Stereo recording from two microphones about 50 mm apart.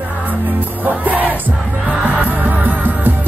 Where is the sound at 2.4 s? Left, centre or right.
Right.